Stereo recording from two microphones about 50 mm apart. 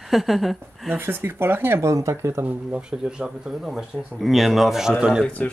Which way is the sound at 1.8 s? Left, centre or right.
Right.